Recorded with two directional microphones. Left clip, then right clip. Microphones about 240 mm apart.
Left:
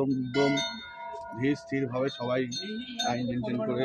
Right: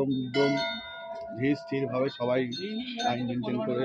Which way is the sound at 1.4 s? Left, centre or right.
Centre.